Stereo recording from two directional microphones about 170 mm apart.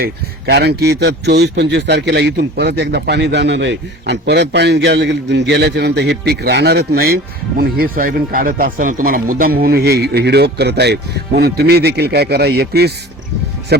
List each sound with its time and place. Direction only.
0.0 s a man's voice: 70° right (ahead or behind)